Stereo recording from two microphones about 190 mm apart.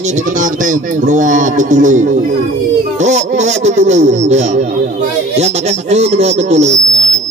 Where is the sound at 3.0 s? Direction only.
40° right (ahead or behind).